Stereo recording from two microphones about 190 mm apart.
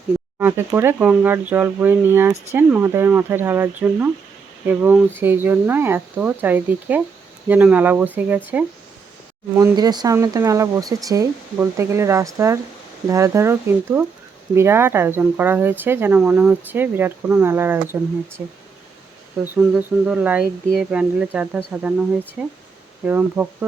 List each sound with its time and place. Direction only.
0.3 s speech: 10° right (ahead or behind)
9.6 s speech: 20° right (ahead or behind)
19.7 s speech: 5° right (ahead or behind)